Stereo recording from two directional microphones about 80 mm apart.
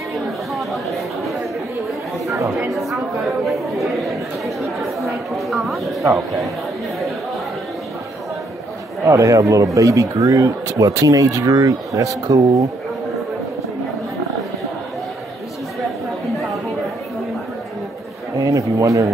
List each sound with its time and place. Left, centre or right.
0.6 s chatter: centre
2.7 s speech: centre
6.0 s speech: right
9.0 s speech: right
18.4 s speech: right